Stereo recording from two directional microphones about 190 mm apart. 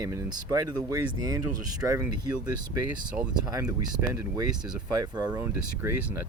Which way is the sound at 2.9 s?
5° right (ahead or behind).